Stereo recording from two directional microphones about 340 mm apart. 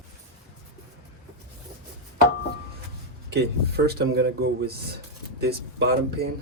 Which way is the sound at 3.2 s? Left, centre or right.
Right.